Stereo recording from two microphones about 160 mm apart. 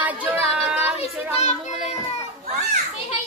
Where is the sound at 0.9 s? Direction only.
40° left (ahead or behind).